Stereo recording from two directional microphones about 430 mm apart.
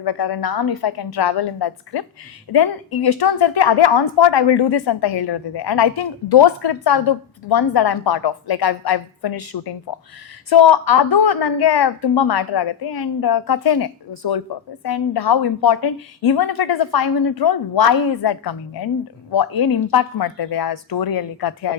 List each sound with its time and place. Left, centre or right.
0.0 s a woman's voice: left